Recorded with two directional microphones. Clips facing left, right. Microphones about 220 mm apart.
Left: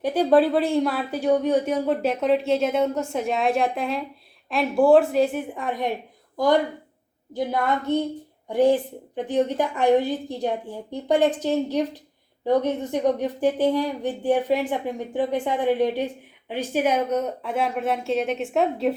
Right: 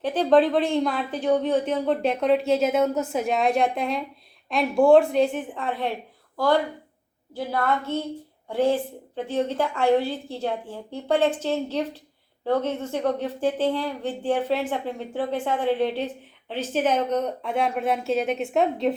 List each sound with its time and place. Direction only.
0.0 s speech: 10° left (ahead or behind)